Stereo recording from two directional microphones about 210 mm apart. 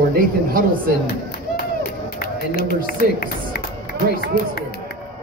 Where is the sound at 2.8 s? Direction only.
45° left (ahead or behind).